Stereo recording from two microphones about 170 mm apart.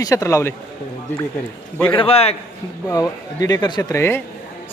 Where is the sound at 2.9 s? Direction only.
20° left (ahead or behind).